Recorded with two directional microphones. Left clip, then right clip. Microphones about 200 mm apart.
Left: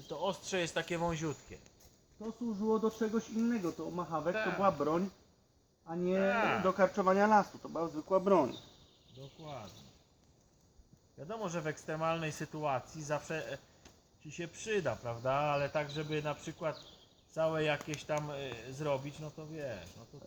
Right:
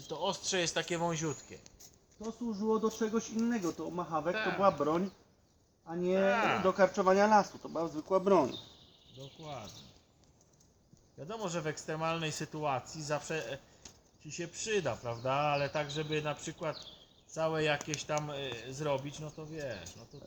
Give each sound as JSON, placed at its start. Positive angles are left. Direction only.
{"t": 0.1, "sound": "speech", "side_deg": 0}
{"t": 2.5, "sound": "speech", "side_deg": 15}
{"t": 4.3, "sound": "speech", "side_deg": 0}
{"t": 4.6, "sound": "speech", "side_deg": 15}
{"t": 6.1, "sound": "speech", "side_deg": 0}
{"t": 6.7, "sound": "speech", "side_deg": 15}
{"t": 9.4, "sound": "speech", "side_deg": 0}
{"t": 11.2, "sound": "speech", "side_deg": -5}